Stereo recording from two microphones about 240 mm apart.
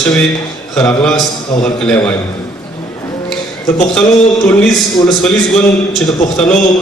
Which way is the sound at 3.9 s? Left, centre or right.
Centre.